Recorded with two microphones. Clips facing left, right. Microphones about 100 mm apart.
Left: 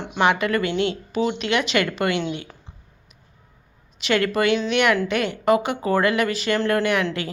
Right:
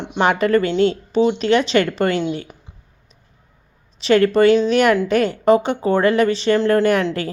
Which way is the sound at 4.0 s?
35° right (ahead or behind).